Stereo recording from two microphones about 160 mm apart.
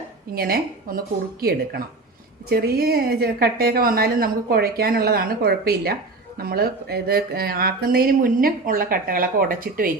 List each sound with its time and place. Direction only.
0.3 s a woman's voice: 65° right (ahead or behind)